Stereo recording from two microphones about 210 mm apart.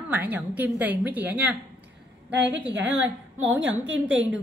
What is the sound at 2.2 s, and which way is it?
Speech, 60° right (ahead or behind).